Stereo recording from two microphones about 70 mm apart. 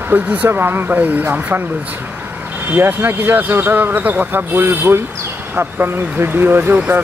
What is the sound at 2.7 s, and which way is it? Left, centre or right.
Speech, right.